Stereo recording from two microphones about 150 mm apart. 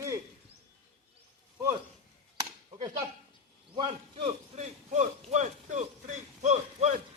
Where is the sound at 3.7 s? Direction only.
35° right (ahead or behind).